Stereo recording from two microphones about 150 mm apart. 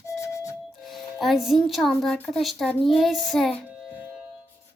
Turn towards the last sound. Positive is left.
turn(degrees=-10)  # may be behind; listen again after turning